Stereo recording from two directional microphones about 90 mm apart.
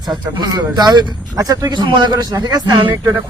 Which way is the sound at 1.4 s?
40° right (ahead or behind).